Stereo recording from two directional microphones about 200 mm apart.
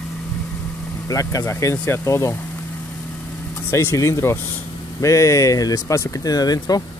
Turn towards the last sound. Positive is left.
turn(degrees=20)  # may be behind; listen again after turning